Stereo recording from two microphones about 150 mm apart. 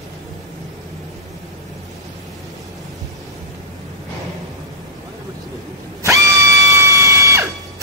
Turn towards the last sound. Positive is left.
turn(degrees=-20)  # may be behind; listen again after turning